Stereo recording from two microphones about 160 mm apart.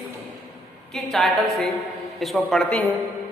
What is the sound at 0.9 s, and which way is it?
A woman's voice, centre (ahead or behind).